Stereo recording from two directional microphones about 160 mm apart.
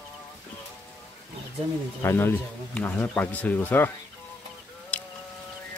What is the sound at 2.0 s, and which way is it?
Speech, 15° left (ahead or behind).